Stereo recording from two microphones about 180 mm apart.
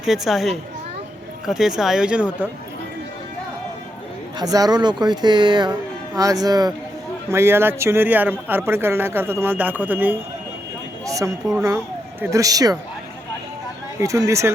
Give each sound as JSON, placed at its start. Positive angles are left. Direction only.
{"t": 0.0, "sound": "speech", "side_deg": 0}
{"t": 4.4, "sound": "a man's voice", "side_deg": -20}
{"t": 14.0, "sound": "a man's voice", "side_deg": -15}